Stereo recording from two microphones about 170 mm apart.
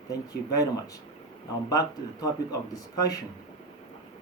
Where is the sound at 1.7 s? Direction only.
20° left (ahead or behind).